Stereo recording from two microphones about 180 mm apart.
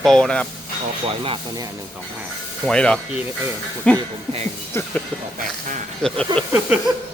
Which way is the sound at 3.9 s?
35° right (ahead or behind).